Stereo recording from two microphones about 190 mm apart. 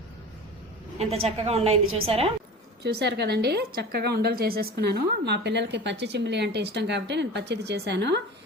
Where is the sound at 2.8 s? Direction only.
60° right (ahead or behind).